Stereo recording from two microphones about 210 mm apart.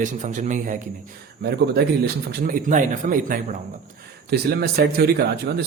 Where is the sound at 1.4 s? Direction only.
50° right (ahead or behind).